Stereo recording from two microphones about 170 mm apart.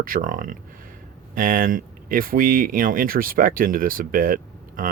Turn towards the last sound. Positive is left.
turn(degrees=-55)  # may be behind; listen again after turning